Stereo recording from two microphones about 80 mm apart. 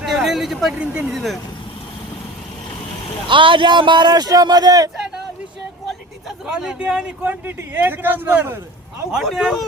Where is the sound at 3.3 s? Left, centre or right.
Right.